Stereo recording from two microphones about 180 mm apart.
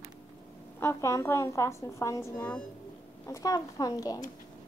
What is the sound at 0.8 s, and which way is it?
A woman's voice, 15° left (ahead or behind).